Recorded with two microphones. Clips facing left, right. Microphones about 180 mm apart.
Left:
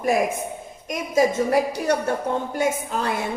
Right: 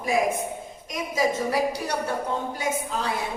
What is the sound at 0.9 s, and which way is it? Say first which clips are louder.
A woman's voice: left 5 dB; 55° left (ahead or behind).